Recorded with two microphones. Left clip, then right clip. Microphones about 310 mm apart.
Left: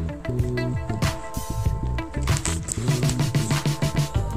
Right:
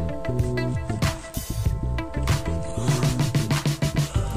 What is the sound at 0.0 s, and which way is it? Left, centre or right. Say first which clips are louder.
Music: right 2 dB; centre.